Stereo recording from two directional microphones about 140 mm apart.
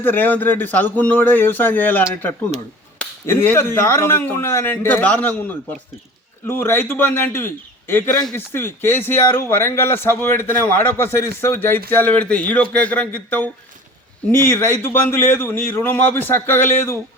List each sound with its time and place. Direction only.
0.0 s speech: 15° left (ahead or behind)
3.2 s speech: 15° left (ahead or behind)